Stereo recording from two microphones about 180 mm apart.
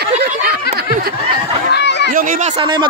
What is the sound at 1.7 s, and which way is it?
Chatter, 70° left (ahead or behind).